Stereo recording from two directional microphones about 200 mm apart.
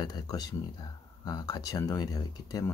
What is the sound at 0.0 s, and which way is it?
Speech, 20° left (ahead or behind).